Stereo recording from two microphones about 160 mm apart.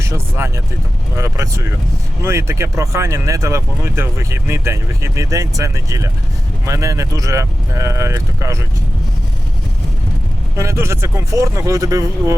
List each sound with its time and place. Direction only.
0.0 s speech: 15° right (ahead or behind)
10.6 s speech: 15° right (ahead or behind)